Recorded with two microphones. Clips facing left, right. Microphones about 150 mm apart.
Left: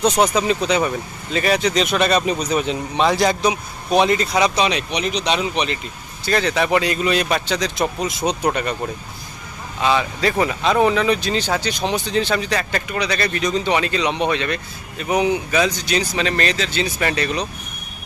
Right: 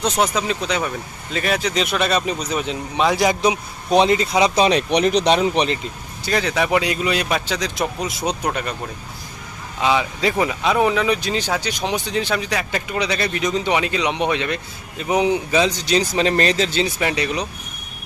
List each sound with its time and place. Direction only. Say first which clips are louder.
0.0 s speech: left 3 dB; centre (ahead or behind)
3.9 s speech: right 1 dB; 25° right (ahead or behind)
4.5 s speech: right 4 dB; 45° right (ahead or behind)
6.2 s speech: left 1 dB; 10° right (ahead or behind)
9.8 s speech: even; 15° right (ahead or behind)
12.9 s speech: right 1 dB; 20° right (ahead or behind); by 16.8 s 35° right (ahead or behind)
17.0 s speech: even; 15° right (ahead or behind)